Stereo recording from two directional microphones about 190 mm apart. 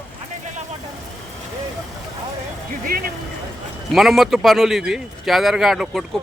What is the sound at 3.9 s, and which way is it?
A man's voice, centre (ahead or behind).